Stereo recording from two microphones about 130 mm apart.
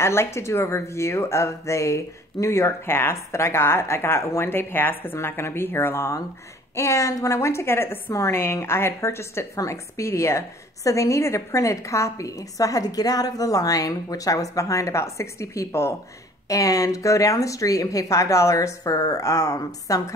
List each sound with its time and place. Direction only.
0.0 s a woman's voice: 20° left (ahead or behind)